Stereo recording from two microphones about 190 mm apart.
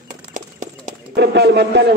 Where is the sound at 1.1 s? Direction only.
60° right (ahead or behind).